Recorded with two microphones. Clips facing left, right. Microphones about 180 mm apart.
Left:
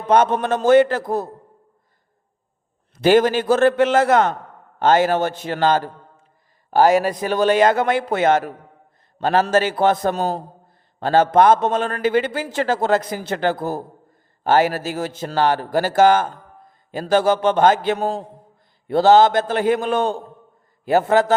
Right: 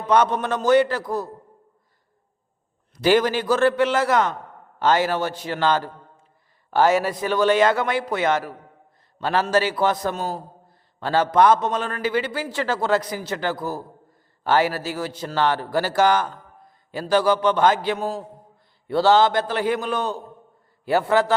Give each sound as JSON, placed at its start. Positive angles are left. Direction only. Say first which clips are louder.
{"t": 0.1, "sound": "a man's voice", "louder": "left 3 dB", "side_deg": 50}
{"t": 3.0, "sound": "a man's voice", "louder": "left 4 dB", "side_deg": 50}
{"t": 20.9, "sound": "a man's voice", "louder": "left 3 dB", "side_deg": 45}